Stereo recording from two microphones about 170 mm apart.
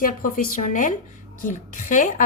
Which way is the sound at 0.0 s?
55° left (ahead or behind).